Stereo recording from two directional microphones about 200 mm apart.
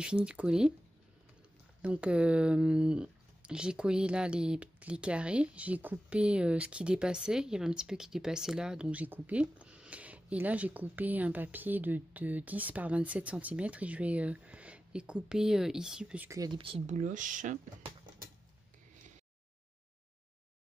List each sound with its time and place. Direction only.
0.0 s speech: 5° right (ahead or behind)
1.8 s speech: 5° right (ahead or behind)
16.3 s speech: 20° right (ahead or behind); by 17.6 s 40° right (ahead or behind)